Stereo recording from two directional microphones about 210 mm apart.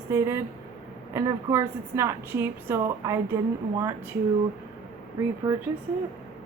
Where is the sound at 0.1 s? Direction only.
15° right (ahead or behind).